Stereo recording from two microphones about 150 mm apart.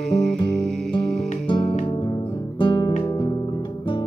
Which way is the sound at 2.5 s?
30° left (ahead or behind).